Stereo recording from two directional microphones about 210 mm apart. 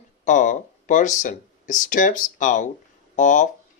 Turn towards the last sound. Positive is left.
turn(degrees=35)  # may be behind; listen again after turning